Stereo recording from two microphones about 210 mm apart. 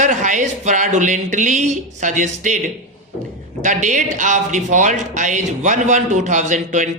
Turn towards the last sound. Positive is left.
turn(degrees=-35)  # may be behind; listen again after turning